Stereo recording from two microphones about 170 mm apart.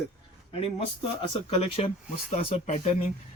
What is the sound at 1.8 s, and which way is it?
Speech, 35° left (ahead or behind).